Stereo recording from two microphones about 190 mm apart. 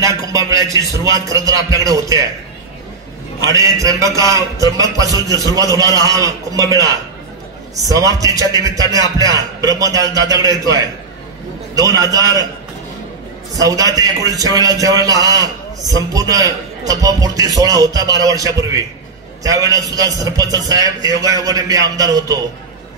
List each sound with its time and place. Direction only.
0.0 s a man's voice: 15° right (ahead or behind)
3.4 s a man's voice: 15° right (ahead or behind)
13.5 s a man's voice: 20° right (ahead or behind)